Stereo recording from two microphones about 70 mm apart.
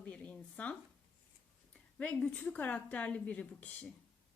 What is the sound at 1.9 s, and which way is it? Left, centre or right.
A woman's voice, centre.